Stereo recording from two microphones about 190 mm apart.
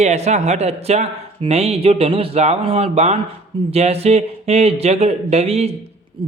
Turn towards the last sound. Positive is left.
turn(degrees=-30)  # may be behind; listen again after turning